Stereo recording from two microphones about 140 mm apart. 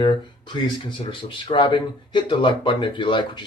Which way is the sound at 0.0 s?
35° left (ahead or behind).